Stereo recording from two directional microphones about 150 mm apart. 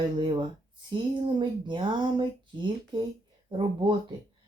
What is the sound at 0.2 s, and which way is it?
Speech, 30° right (ahead or behind).